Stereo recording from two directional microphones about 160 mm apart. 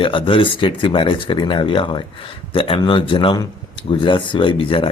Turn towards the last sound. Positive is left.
turn(degrees=35)  # may be behind; listen again after turning